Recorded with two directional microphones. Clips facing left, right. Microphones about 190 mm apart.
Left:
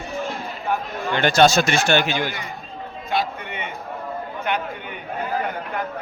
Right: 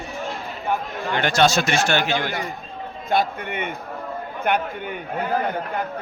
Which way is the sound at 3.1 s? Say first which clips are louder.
Right 3 dB; 50° right (ahead or behind).